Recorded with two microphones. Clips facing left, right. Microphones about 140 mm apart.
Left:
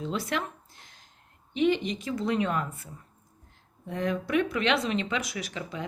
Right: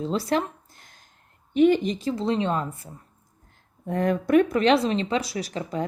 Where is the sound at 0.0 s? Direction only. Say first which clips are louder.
Right 6 dB; 35° right (ahead or behind).